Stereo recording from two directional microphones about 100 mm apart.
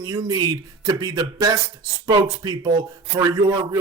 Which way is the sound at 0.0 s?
40° right (ahead or behind).